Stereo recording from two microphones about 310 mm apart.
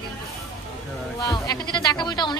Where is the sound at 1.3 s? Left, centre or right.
Centre.